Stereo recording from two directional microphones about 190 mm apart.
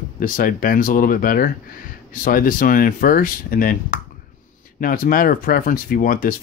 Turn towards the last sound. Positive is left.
turn(degrees=50)  # may be behind; listen again after turning